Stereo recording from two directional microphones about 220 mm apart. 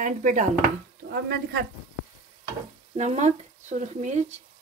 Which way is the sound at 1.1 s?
50° right (ahead or behind).